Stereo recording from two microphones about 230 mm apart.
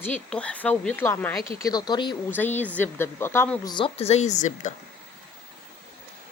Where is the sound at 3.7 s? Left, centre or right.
Left.